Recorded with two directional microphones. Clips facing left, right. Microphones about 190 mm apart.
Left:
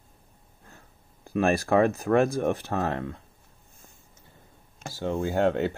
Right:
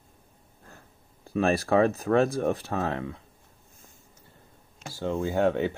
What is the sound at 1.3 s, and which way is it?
Speech, 10° left (ahead or behind).